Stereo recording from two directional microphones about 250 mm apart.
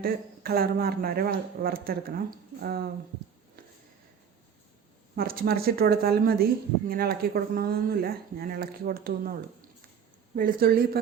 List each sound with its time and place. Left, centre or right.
0.0 s speech: right
5.1 s speech: right